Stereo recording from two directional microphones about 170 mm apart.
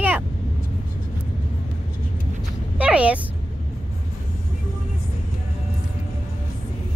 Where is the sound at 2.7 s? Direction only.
5° right (ahead or behind).